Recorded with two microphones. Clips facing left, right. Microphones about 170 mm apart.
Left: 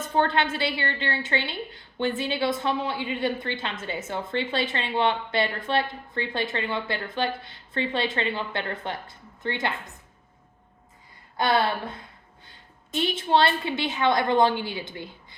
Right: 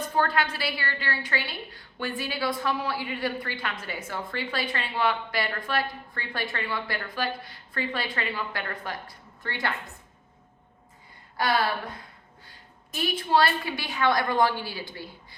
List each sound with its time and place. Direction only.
0.1 s a woman's voice: 25° left (ahead or behind)
11.3 s a woman's voice: 25° left (ahead or behind)
12.9 s a woman's voice: 25° left (ahead or behind)